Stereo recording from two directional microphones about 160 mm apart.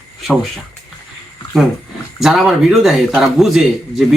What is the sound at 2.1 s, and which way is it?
A man's voice, 5° right (ahead or behind).